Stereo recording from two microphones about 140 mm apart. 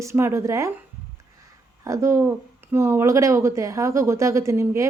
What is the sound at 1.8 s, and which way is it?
Speech, 20° right (ahead or behind).